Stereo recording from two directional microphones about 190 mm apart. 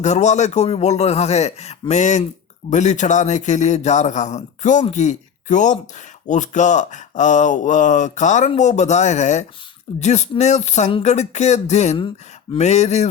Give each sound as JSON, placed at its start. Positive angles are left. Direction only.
{"t": 0.0, "sound": "speech", "side_deg": 40}